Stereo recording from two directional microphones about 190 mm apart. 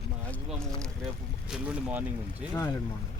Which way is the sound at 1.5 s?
5° right (ahead or behind).